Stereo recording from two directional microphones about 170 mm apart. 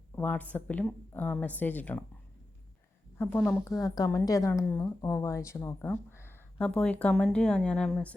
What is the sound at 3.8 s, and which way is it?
A woman's voice, 20° left (ahead or behind).